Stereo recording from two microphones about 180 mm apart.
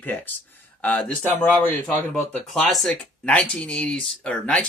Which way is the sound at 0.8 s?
10° left (ahead or behind).